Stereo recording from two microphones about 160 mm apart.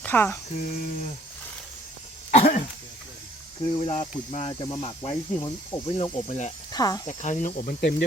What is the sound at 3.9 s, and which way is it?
Speech, 40° left (ahead or behind).